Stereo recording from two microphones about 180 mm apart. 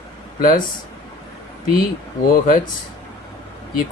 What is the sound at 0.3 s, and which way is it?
Speech, 50° left (ahead or behind).